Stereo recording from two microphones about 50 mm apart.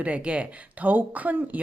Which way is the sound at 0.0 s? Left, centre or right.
Right.